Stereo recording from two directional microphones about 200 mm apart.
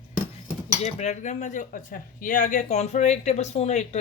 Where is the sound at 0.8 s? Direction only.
35° left (ahead or behind).